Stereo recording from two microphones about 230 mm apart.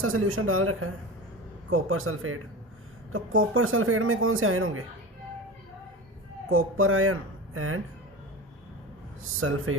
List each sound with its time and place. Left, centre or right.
0.0 s a man's voice: right
6.5 s speech: right
9.4 s speech: right